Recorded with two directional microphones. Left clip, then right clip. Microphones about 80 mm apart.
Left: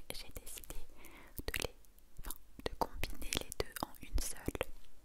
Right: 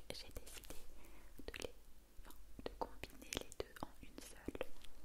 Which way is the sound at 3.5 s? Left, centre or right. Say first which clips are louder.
Left 8 dB; left.